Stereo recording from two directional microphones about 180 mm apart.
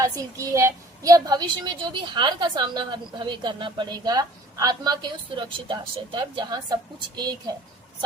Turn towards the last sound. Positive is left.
turn(degrees=-25)  # may be behind; listen again after turning